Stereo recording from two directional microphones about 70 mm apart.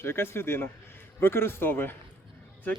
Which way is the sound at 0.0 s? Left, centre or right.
Left.